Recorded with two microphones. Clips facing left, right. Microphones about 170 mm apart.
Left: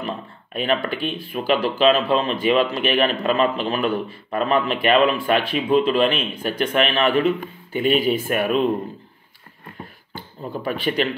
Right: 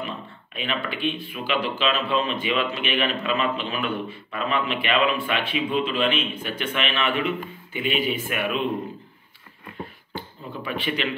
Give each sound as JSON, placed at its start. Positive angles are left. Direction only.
{"t": 0.0, "sound": "a man's voice", "side_deg": 45}
{"t": 10.6, "sound": "a man's voice", "side_deg": 40}